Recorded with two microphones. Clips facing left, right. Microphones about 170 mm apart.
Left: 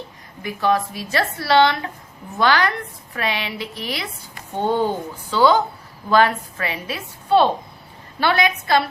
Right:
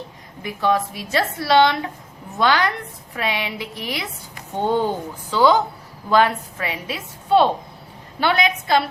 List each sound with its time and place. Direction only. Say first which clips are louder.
0.4 s a woman's voice: even; 20° right (ahead or behind)